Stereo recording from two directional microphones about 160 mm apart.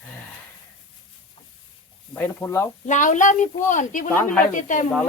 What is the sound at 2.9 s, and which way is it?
A woman's voice, 50° left (ahead or behind).